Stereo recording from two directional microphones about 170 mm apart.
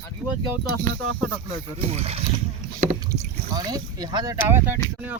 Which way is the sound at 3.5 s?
25° right (ahead or behind).